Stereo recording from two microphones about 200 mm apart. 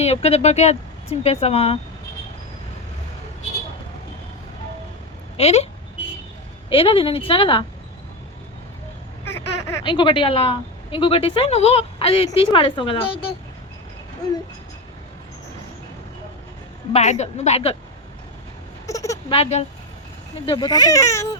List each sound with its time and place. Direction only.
0.0 s a woman's voice: 30° left (ahead or behind)
5.4 s a woman's voice: 30° left (ahead or behind)
6.7 s a woman's voice: 25° left (ahead or behind)
9.2 s baby laughter: 10° left (ahead or behind)
9.8 s a woman's voice: 25° left (ahead or behind)
16.9 s a woman's voice: 35° left (ahead or behind)
18.9 s a sound: 15° left (ahead or behind)
19.3 s a woman's voice: 30° left (ahead or behind); by 21.2 s 15° left (ahead or behind)